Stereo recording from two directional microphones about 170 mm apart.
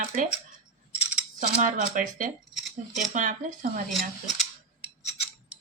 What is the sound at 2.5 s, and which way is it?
Cutlery, centre (ahead or behind).